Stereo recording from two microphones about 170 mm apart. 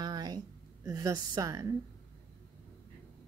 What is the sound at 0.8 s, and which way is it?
Speech, 20° right (ahead or behind).